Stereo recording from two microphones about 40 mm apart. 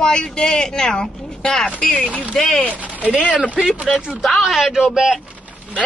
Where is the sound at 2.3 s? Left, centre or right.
Centre.